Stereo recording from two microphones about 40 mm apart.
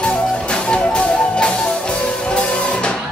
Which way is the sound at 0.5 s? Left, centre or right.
Left.